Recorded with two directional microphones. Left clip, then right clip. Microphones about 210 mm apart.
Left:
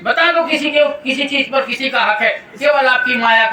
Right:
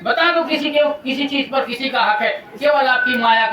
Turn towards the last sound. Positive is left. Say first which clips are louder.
# left 2 dB
turn(degrees=25)  # may be behind; listen again after turning